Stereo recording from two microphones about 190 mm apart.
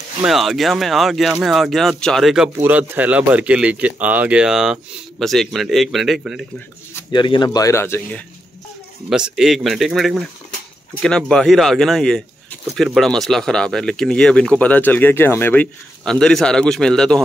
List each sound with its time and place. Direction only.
0.2 s speech: centre (ahead or behind)
7.1 s speech: 25° left (ahead or behind)
9.1 s speech: 5° right (ahead or behind)